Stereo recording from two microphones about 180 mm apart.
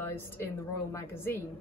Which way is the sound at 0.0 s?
10° left (ahead or behind).